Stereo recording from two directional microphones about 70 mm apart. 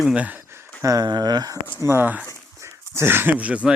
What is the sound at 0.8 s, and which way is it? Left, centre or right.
Speech, right.